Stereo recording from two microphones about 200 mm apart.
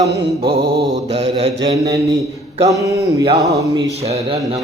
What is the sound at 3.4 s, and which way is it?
Speech, 15° right (ahead or behind).